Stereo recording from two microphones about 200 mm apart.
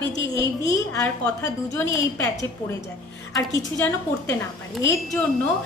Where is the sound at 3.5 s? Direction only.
15° left (ahead or behind).